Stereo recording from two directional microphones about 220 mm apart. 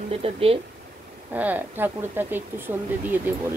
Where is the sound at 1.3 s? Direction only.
10° right (ahead or behind).